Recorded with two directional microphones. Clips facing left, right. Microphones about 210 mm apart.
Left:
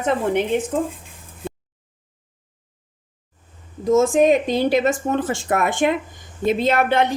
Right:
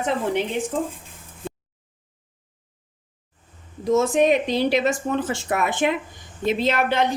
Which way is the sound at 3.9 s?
45° left (ahead or behind).